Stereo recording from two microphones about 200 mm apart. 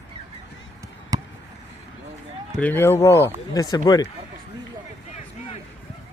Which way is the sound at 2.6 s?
10° left (ahead or behind).